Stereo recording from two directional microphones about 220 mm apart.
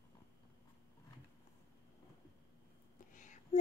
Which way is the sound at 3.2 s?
35° left (ahead or behind).